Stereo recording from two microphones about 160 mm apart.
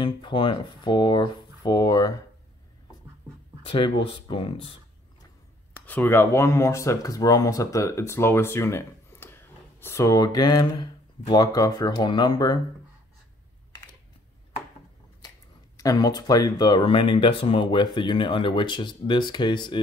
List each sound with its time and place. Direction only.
0.0 s speech: 30° left (ahead or behind)
3.6 s speech: 30° left (ahead or behind)
5.9 s speech: 10° left (ahead or behind); by 12.5 s 25° left (ahead or behind)
15.8 s speech: 20° left (ahead or behind)